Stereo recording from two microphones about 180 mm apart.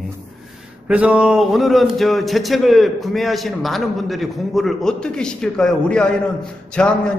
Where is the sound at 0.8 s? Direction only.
5° right (ahead or behind).